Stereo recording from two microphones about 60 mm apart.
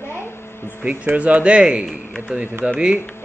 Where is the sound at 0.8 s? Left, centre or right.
Right.